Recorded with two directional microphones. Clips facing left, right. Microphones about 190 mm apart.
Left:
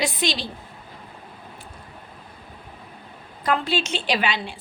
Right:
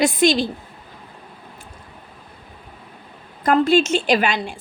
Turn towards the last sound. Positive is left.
turn(degrees=-45)  # may be behind; listen again after turning